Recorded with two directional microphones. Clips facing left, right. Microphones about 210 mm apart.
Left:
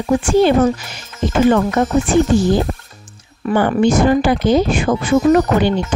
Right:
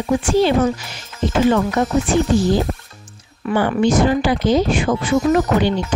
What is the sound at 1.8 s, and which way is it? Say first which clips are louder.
Speech: left 2 dB; 55° left (ahead or behind).